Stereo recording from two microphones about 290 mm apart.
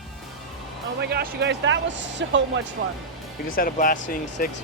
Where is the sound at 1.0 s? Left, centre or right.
Right.